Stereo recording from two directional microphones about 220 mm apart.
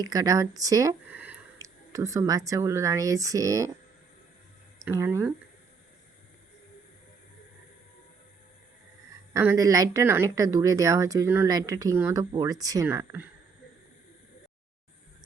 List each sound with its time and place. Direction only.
0.0 s speech: 15° right (ahead or behind)
4.8 s speech: 10° right (ahead or behind)
9.3 s speech: 10° right (ahead or behind)